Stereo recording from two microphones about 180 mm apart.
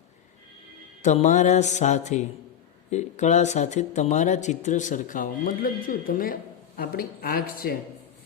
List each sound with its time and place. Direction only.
1.0 s speech: 40° left (ahead or behind)